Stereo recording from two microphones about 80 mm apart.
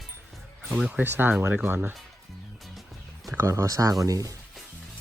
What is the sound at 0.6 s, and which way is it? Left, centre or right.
Speech, centre.